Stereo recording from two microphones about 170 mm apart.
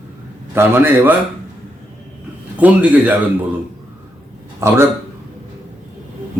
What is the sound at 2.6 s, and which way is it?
Speech, 10° right (ahead or behind).